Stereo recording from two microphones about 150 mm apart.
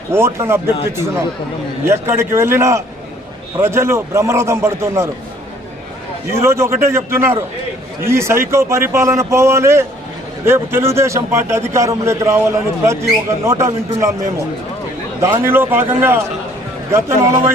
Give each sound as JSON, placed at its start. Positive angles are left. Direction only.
{"t": 0.1, "sound": "a man's voice", "side_deg": -15}
{"t": 1.8, "sound": "a man's voice", "side_deg": -15}
{"t": 6.3, "sound": "a man's voice", "side_deg": -20}
{"t": 15.2, "sound": "a man's voice", "side_deg": -15}